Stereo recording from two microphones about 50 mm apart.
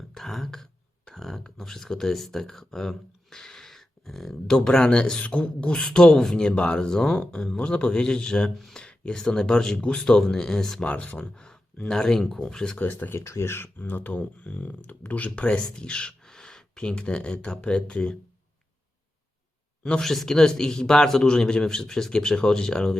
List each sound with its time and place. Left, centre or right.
0.1 s a man's voice: centre
10.8 s speech: left
11.3 s speech: centre
12.8 s speech: left
13.1 s speech: left
13.7 s speech: left
14.4 s speech: left
15.4 s a man's voice: centre
20.0 s a man's voice: centre